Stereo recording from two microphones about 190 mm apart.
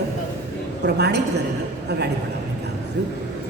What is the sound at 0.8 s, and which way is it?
Speech, 60° right (ahead or behind).